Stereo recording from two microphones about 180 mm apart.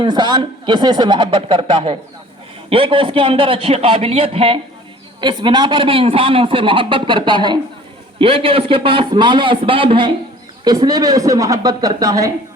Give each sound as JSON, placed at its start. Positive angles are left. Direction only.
{"t": 0.0, "sound": "a man's voice", "side_deg": -25}